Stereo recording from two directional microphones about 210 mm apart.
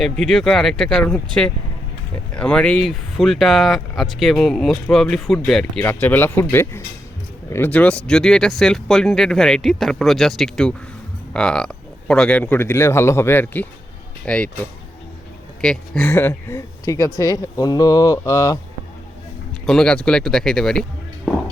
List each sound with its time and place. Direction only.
0.0 s speech: centre (ahead or behind)
19.6 s speech: 5° left (ahead or behind)